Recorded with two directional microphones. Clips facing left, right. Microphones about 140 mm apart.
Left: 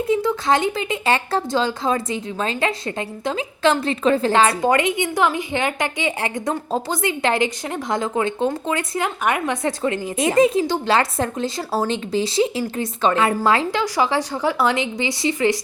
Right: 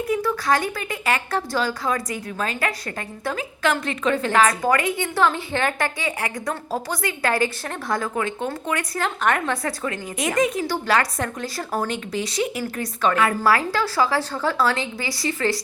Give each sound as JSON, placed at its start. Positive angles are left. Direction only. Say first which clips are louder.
{"t": 0.1, "sound": "speech", "louder": "left 3 dB", "side_deg": 20}
{"t": 9.0, "sound": "speech", "louder": "right 1 dB", "side_deg": 10}
{"t": 9.6, "sound": "speech", "louder": "left 5 dB", "side_deg": 25}